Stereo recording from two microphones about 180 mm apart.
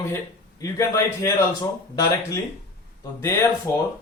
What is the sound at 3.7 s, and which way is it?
Speech, 15° left (ahead or behind).